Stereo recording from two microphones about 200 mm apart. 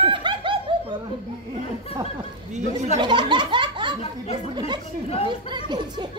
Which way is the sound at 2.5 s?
35° right (ahead or behind).